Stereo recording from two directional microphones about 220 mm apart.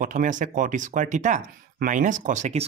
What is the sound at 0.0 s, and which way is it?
Speech, 35° right (ahead or behind).